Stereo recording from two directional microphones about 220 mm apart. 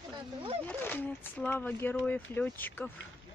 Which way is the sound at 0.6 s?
10° left (ahead or behind).